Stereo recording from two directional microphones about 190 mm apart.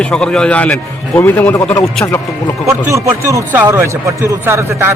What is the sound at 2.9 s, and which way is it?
A man's voice, 15° right (ahead or behind).